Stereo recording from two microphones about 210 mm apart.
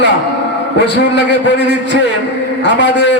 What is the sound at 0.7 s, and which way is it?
Speech, 55° left (ahead or behind).